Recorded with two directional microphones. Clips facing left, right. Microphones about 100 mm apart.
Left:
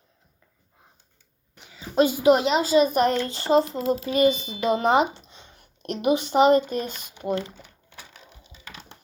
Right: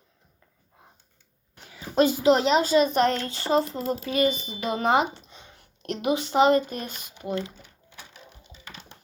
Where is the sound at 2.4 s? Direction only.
5° left (ahead or behind); by 4.8 s 25° left (ahead or behind).